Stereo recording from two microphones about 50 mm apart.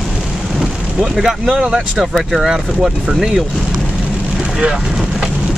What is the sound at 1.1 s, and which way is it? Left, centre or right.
Speech, centre.